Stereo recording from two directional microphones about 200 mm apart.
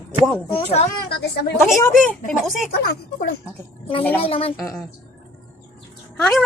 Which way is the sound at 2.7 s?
55° left (ahead or behind).